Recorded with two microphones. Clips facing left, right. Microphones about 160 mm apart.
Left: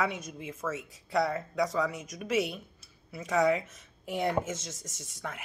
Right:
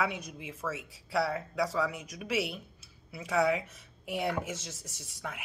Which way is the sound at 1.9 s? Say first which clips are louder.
Left 2 dB; 40° left (ahead or behind).